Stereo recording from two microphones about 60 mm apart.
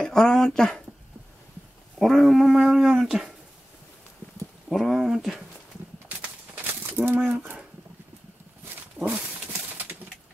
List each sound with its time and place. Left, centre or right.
0.0 s speech: centre
2.0 s speech: centre
4.6 s speech: centre
6.0 s a sound: right
9.0 s horse: right